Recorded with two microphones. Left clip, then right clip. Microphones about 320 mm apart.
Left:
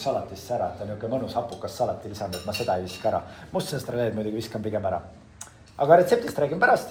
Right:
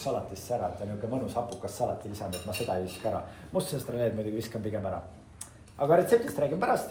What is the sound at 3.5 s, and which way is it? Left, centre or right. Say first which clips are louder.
Speech: left 3 dB; left.